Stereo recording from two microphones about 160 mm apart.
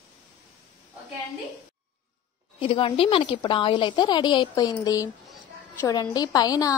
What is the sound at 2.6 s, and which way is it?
A woman's voice, 30° left (ahead or behind).